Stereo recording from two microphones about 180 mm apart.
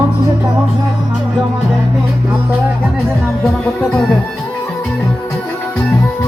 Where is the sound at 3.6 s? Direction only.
5° left (ahead or behind).